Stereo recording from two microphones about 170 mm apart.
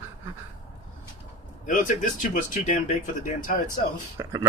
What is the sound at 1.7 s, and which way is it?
Speech, 50° left (ahead or behind).